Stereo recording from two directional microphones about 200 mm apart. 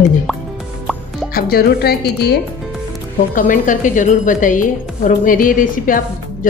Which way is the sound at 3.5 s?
40° left (ahead or behind).